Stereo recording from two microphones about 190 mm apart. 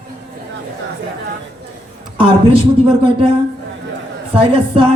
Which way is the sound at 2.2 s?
25° right (ahead or behind).